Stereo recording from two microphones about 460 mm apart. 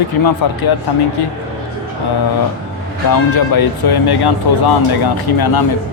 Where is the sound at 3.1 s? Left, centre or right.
Left.